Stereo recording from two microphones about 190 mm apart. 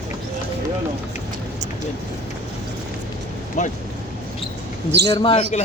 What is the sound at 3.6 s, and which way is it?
Speech, 35° left (ahead or behind).